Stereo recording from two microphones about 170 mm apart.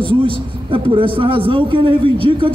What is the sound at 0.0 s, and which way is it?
Speech, 30° right (ahead or behind).